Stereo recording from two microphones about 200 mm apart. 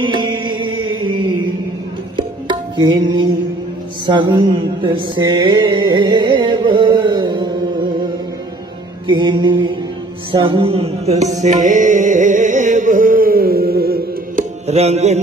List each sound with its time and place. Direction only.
0.0 s music: 20° right (ahead or behind)
4.0 s mantra: 25° right (ahead or behind)
9.0 s music: 25° right (ahead or behind); by 14.4 s 50° right (ahead or behind)
14.7 s music: 30° right (ahead or behind)